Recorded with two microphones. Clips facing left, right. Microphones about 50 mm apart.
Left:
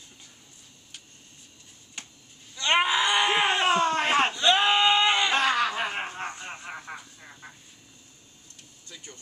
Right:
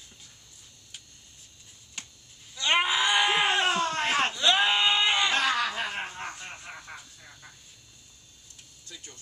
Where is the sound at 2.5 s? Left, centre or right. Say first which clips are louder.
Left 2 dB; centre.